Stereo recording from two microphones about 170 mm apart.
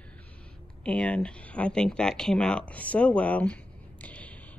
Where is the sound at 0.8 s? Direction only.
5° left (ahead or behind).